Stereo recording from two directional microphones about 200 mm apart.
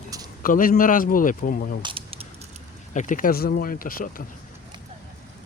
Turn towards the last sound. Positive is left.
turn(degrees=45)  # may be behind; listen again after turning